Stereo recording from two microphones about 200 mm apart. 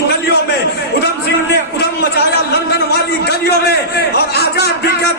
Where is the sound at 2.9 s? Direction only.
55° left (ahead or behind).